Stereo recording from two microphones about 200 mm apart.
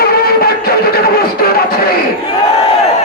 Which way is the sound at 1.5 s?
50° left (ahead or behind).